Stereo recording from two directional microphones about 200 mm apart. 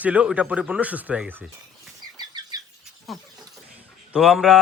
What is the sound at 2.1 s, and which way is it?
Bird flight, 20° right (ahead or behind).